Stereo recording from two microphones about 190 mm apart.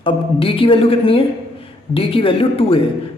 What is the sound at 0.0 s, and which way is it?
A woman's voice, 30° left (ahead or behind).